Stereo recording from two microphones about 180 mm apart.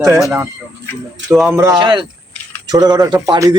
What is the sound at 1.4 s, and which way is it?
Speech, 15° right (ahead or behind).